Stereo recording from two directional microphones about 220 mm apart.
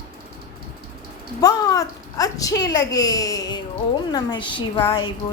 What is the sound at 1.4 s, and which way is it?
A woman's voice, 15° left (ahead or behind).